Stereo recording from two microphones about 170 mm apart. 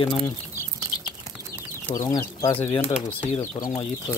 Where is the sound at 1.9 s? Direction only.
20° left (ahead or behind).